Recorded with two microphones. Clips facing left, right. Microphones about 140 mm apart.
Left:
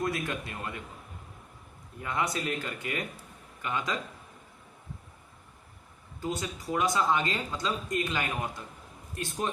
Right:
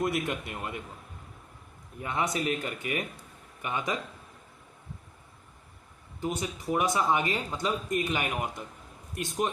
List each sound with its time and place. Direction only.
0.0 s a man's voice: 20° right (ahead or behind)
2.0 s a man's voice: 25° right (ahead or behind)
6.1 s a man's voice: 20° right (ahead or behind)